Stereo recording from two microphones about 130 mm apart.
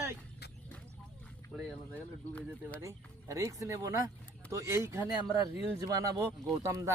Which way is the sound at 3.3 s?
25° right (ahead or behind).